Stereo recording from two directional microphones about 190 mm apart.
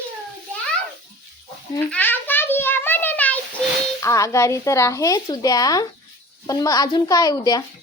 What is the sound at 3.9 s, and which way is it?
A child's voice, 15° left (ahead or behind).